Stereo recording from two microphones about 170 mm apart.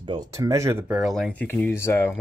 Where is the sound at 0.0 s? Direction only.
30° right (ahead or behind).